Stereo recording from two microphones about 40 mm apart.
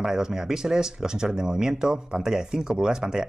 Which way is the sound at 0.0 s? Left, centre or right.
Centre.